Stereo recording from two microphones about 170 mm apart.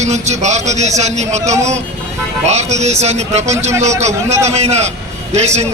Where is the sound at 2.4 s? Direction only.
40° right (ahead or behind).